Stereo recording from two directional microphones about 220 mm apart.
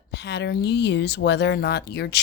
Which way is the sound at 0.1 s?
50° left (ahead or behind).